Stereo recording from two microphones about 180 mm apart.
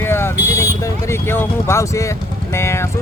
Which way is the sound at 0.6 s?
15° left (ahead or behind).